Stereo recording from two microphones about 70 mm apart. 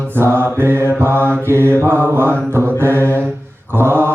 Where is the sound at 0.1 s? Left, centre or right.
Right.